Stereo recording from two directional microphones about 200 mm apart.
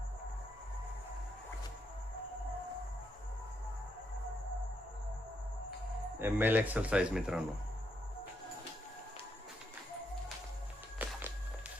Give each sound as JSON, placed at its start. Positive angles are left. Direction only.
{"t": 6.1, "sound": "speech", "side_deg": -10}
{"t": 10.9, "sound": "walk", "side_deg": -10}